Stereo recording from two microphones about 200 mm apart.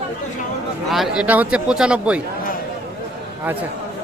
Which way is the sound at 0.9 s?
Centre (ahead or behind).